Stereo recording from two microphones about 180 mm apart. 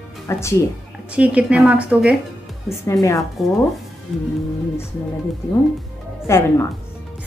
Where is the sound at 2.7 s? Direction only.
15° left (ahead or behind).